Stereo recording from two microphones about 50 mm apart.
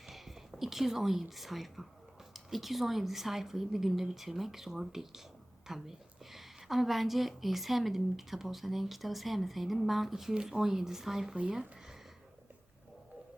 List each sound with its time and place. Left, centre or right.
0.0 s a woman's voice: centre